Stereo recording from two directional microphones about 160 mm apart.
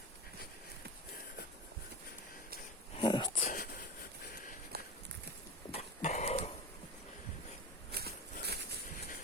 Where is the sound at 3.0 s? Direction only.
30° left (ahead or behind).